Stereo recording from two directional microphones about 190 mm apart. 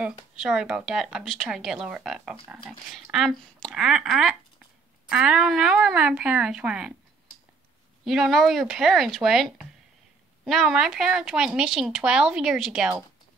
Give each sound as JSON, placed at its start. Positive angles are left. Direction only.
{"t": 0.0, "sound": "speech", "side_deg": -5}
{"t": 8.0, "sound": "speech", "side_deg": 0}